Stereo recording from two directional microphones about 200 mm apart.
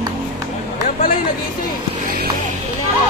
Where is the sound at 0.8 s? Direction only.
40° left (ahead or behind).